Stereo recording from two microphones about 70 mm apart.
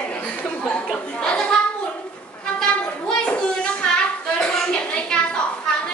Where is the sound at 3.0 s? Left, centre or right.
Centre.